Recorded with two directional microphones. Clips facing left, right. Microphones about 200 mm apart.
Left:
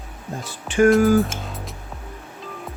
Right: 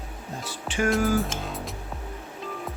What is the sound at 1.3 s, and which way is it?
Music, centre (ahead or behind).